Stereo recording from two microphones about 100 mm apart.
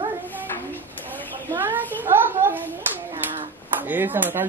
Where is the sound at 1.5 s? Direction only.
20° right (ahead or behind).